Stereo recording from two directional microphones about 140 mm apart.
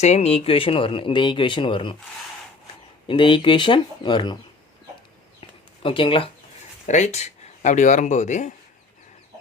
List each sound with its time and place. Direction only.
0.0 s speech: 50° left (ahead or behind)
3.1 s speech: 35° left (ahead or behind)
5.4 s a sound: 40° left (ahead or behind)
6.8 s speech: 55° left (ahead or behind)